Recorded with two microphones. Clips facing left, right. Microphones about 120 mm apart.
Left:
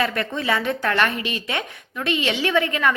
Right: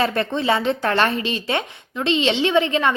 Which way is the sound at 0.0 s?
30° right (ahead or behind).